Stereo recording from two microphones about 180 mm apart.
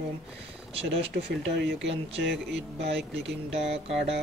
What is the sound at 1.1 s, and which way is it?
Speech, 70° right (ahead or behind).